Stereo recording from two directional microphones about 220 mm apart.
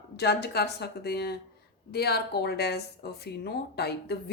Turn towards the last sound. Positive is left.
turn(degrees=45)  # may be behind; listen again after turning